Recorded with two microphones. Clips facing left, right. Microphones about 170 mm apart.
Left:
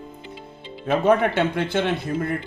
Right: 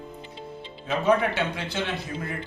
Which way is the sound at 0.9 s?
50° left (ahead or behind).